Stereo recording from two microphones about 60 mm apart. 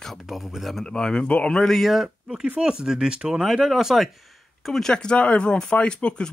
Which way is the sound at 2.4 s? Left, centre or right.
Centre.